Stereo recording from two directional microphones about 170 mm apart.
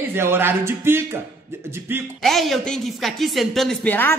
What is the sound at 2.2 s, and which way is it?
A man's voice, centre (ahead or behind).